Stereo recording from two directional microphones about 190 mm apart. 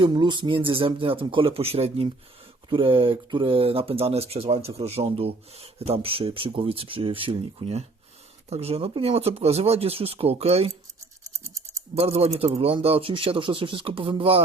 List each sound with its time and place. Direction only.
0.0 s speech: 25° right (ahead or behind)
11.9 s speech: 30° right (ahead or behind)